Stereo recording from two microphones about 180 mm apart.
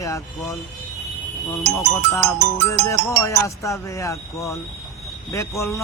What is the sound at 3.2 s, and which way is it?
Speech, 15° left (ahead or behind).